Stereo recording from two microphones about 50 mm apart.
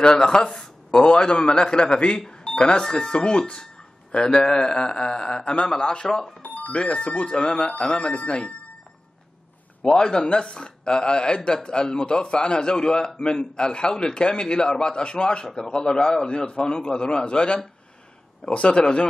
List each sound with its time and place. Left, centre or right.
0.0 s speech: centre
6.4 s speech: left
9.9 s speech: centre